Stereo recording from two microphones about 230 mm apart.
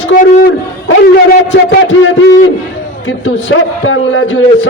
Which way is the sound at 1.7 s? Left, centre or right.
Left.